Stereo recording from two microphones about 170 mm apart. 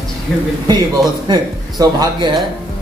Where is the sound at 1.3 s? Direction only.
25° right (ahead or behind).